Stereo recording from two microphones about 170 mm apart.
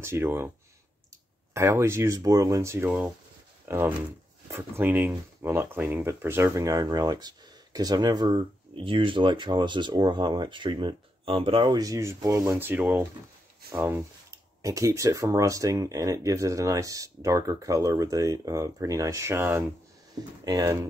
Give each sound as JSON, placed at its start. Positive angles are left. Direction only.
{"t": 0.0, "sound": "speech", "side_deg": -15}
{"t": 1.5, "sound": "speech", "side_deg": -15}
{"t": 20.4, "sound": "speech", "side_deg": -25}